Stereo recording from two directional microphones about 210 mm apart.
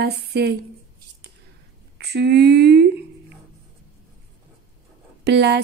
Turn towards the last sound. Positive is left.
turn(degrees=-55)  # may be behind; listen again after turning